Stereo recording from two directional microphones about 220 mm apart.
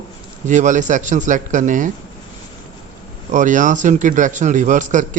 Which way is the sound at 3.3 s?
35° right (ahead or behind).